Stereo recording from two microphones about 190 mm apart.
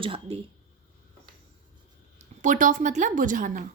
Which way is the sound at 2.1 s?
40° right (ahead or behind).